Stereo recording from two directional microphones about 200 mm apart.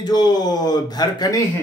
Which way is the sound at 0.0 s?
20° left (ahead or behind).